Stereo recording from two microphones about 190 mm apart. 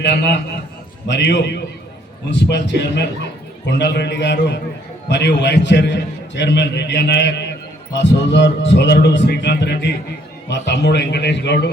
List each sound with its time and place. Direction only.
0.0 s a man's voice: 65° left (ahead or behind)